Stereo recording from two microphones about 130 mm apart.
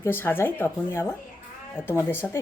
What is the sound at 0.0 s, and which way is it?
A woman's voice, 15° left (ahead or behind).